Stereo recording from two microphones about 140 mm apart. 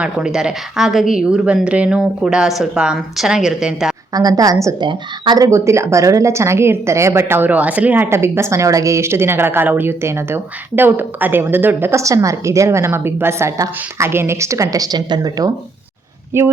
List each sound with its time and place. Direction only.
0.0 s speech: 5° right (ahead or behind)
4.1 s speech: 25° right (ahead or behind)
5.5 s speech: 20° right (ahead or behind)